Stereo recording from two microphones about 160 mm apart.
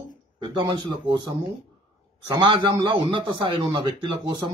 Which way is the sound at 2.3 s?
30° right (ahead or behind).